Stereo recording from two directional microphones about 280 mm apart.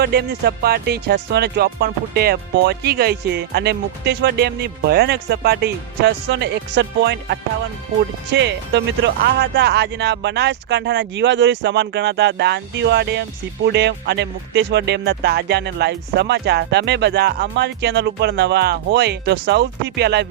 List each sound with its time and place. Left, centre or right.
0.0 s speech: right